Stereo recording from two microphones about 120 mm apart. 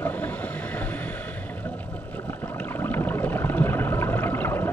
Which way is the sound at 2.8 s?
15° left (ahead or behind).